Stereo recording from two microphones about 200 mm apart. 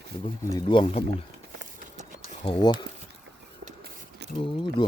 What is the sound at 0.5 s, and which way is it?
Speech, 25° left (ahead or behind).